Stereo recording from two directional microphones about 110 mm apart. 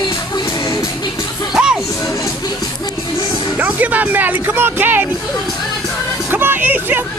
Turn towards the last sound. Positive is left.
turn(degrees=-15)  # may be behind; listen again after turning